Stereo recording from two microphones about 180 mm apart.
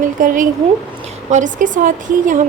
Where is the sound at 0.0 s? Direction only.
45° right (ahead or behind).